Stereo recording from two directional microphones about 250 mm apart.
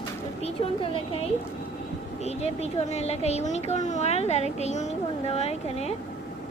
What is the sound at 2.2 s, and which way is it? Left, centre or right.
A child's voice, left.